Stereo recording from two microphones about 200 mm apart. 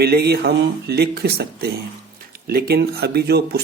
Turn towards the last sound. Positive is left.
turn(degrees=-55)  # may be behind; listen again after turning